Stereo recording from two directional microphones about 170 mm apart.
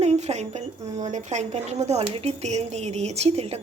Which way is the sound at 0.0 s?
40° right (ahead or behind).